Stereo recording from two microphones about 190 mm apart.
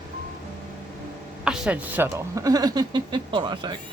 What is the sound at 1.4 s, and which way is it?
Speech, 5° right (ahead or behind).